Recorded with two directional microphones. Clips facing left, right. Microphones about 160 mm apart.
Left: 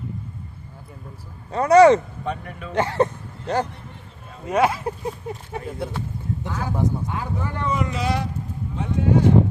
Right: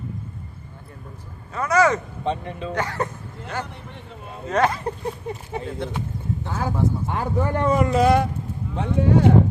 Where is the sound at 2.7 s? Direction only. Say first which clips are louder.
Left 6 dB; 25° left (ahead or behind).